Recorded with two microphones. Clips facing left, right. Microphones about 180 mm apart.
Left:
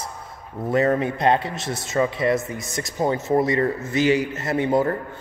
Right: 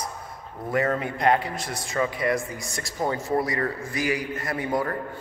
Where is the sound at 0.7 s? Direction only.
20° left (ahead or behind).